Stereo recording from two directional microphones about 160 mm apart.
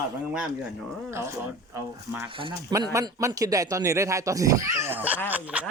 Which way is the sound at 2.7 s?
20° right (ahead or behind).